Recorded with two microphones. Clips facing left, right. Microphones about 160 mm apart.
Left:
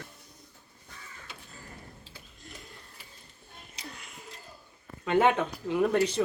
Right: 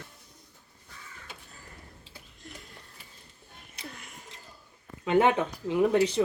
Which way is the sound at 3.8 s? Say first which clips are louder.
Right 1 dB; 55° right (ahead or behind).